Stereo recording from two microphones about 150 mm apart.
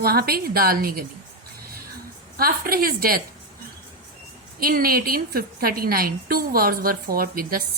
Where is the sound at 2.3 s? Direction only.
80° right.